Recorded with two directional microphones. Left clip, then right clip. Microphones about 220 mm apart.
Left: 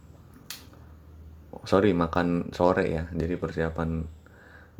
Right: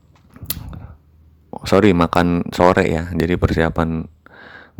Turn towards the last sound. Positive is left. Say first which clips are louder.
# right 11 dB
turn(degrees=-35)  # may be behind; listen again after turning